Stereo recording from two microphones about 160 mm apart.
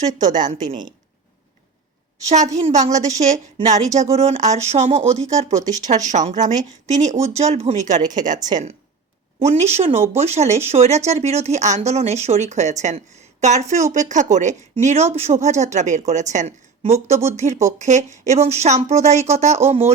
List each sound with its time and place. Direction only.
0.2 s speech: 50° right (ahead or behind)
2.6 s speech: 45° right (ahead or behind)
3.9 s speech: 45° right (ahead or behind)